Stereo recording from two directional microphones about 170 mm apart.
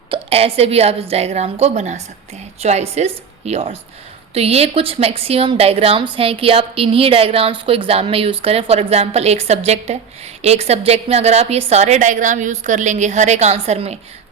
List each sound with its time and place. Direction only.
0.1 s a woman's voice: 35° right (ahead or behind)